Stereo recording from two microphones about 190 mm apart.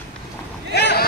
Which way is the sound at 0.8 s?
60° left (ahead or behind).